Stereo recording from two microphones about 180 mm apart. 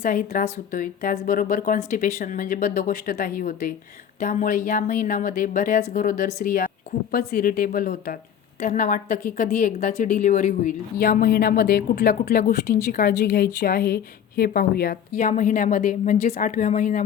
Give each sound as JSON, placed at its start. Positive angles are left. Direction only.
{"t": 0.0, "sound": "speech", "side_deg": 45}
{"t": 7.1, "sound": "a woman's voice", "side_deg": 60}
{"t": 8.6, "sound": "speech", "side_deg": 45}
{"t": 11.0, "sound": "a woman's voice", "side_deg": 55}